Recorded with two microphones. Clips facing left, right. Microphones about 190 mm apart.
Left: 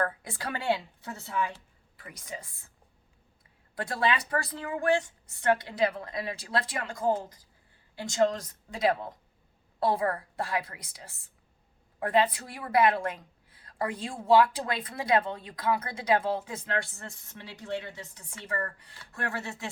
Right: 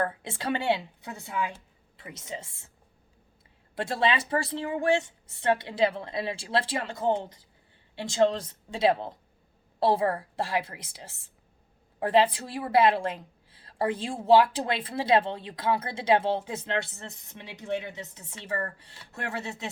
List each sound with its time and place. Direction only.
0.0 s a woman's voice: 25° right (ahead or behind)
3.8 s a woman's voice: 25° right (ahead or behind)